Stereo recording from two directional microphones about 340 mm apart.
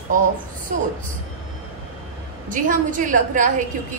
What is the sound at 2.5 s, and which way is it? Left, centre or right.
A woman's voice, right.